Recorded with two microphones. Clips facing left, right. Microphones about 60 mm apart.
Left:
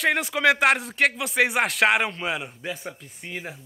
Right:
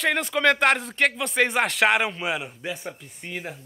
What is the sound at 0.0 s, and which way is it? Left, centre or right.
Speech, centre.